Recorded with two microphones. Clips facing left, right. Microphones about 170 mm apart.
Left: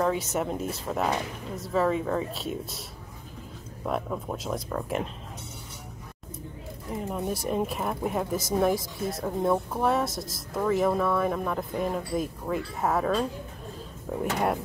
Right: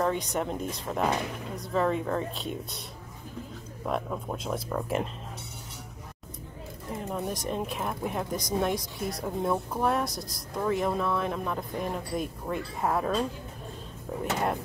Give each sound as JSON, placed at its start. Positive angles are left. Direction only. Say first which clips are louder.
{"t": 0.0, "sound": "speech", "louder": "left 2 dB", "side_deg": 5}
{"t": 3.8, "sound": "speech", "louder": "left 1 dB", "side_deg": 0}
{"t": 7.1, "sound": "speech", "louder": "left 2 dB", "side_deg": 5}